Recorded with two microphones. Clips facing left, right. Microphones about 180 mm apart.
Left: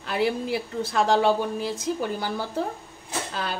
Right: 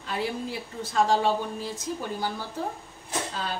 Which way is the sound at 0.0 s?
70° left (ahead or behind).